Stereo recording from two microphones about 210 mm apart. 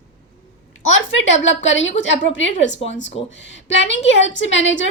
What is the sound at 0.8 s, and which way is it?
A woman's voice, 65° left (ahead or behind).